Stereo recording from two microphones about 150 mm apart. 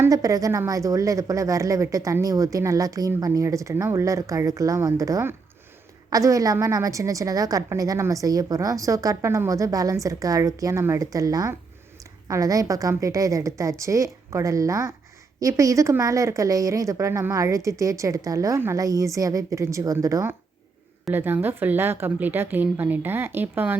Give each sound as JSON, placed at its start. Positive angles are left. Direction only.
{"t": 0.0, "sound": "a woman's voice", "side_deg": -25}